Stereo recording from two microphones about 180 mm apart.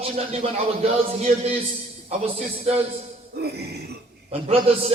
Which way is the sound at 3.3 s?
65° right (ahead or behind).